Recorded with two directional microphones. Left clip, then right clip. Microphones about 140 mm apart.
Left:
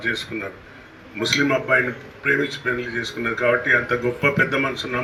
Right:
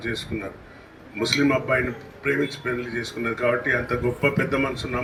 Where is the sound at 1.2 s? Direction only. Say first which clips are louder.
Left 2 dB; 15° right (ahead or behind).